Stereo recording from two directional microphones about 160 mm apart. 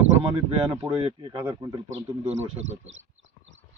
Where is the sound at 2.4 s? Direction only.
40° right (ahead or behind).